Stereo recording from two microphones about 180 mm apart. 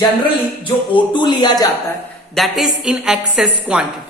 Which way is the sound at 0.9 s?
25° left (ahead or behind).